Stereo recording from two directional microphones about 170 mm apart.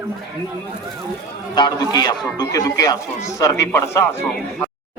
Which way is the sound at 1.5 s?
25° left (ahead or behind).